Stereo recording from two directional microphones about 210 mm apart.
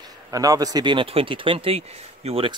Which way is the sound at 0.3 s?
15° right (ahead or behind).